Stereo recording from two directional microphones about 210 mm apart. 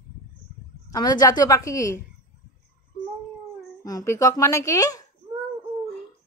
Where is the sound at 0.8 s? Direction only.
20° left (ahead or behind).